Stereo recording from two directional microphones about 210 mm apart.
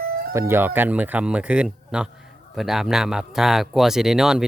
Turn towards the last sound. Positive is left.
turn(degrees=0)  # may be behind; listen again after turning